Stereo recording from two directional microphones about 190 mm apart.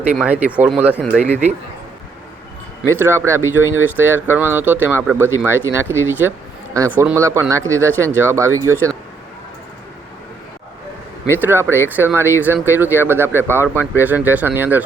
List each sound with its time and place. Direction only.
0.2 s speech: 5° right (ahead or behind)
1.2 s speech: 35° right (ahead or behind)
3.0 s speech: 15° right (ahead or behind)
11.3 s speech: 10° right (ahead or behind)